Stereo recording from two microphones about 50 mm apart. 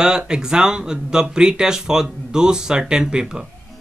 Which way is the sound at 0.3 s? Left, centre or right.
Centre.